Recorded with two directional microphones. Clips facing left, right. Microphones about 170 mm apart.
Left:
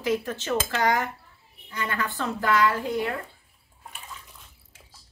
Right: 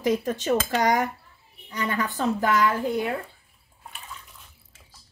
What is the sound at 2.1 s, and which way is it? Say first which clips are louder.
Speech: right 1 dB; 20° right (ahead or behind).